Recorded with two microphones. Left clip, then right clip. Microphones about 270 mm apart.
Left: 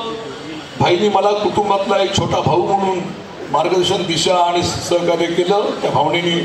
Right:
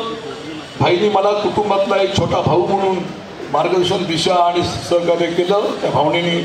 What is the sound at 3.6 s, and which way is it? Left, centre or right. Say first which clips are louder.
A man's voice: even; left.